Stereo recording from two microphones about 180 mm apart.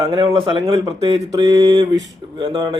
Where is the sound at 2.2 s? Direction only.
30° right (ahead or behind).